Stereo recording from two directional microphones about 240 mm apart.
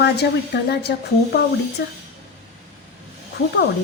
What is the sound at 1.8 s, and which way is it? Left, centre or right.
Speech, left.